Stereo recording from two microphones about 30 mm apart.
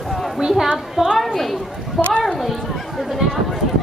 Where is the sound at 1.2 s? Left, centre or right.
Centre.